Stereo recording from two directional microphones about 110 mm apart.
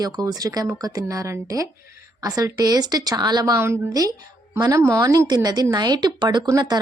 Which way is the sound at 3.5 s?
25° right (ahead or behind).